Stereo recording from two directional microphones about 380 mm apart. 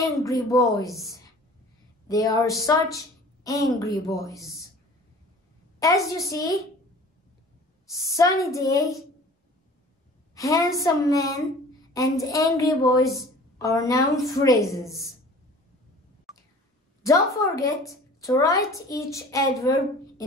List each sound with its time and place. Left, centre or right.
0.0 s a woman's voice: centre
5.8 s a woman's voice: centre
7.8 s a woman's voice: centre
10.3 s a woman's voice: centre
17.0 s a woman's voice: centre